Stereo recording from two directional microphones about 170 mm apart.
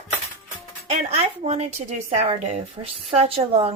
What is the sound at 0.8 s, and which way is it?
A woman's voice, 40° right (ahead or behind).